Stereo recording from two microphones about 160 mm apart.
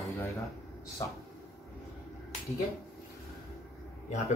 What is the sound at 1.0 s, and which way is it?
Speech, 20° left (ahead or behind).